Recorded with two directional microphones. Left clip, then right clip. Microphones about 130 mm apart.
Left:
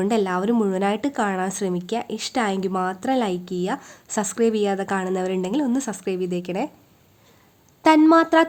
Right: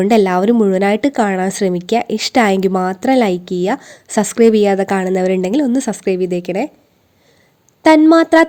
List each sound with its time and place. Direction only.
0.0 s speech: 45° right (ahead or behind)
7.8 s speech: 30° right (ahead or behind)